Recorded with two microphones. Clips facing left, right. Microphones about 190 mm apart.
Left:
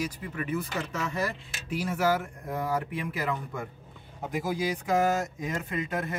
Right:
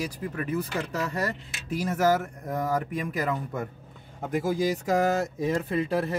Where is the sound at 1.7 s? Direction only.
40° right (ahead or behind).